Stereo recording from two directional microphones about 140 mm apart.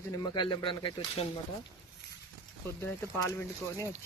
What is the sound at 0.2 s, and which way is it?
Speech, 35° left (ahead or behind).